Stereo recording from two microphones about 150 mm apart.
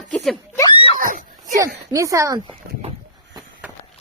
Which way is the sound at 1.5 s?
20° right (ahead or behind).